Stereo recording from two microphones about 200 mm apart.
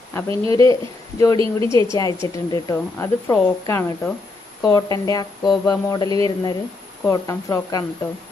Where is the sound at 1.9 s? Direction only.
15° left (ahead or behind).